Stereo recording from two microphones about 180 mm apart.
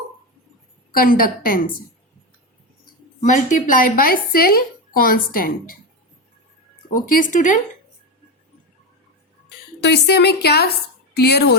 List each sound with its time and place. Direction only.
0.9 s speech: 50° left (ahead or behind)
3.2 s speech: 45° left (ahead or behind)
6.9 s speech: 50° left (ahead or behind)
9.8 s a woman's voice: 65° left (ahead or behind)